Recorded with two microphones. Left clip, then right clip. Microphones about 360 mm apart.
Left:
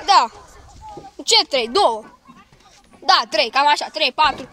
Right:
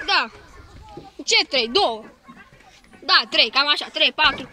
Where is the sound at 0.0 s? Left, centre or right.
Centre.